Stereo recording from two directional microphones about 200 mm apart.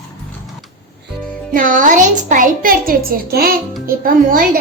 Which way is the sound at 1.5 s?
40° right (ahead or behind).